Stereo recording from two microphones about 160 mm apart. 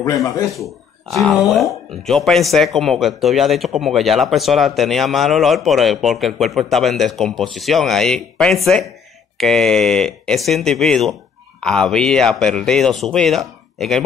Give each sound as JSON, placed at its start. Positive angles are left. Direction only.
{"t": 0.0, "sound": "speech", "side_deg": 20}
{"t": 0.6, "sound": "speech", "side_deg": 0}